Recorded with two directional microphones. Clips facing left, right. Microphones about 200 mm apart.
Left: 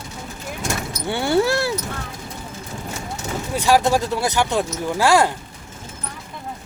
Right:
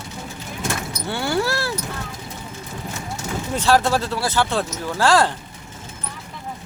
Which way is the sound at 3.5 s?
15° left (ahead or behind).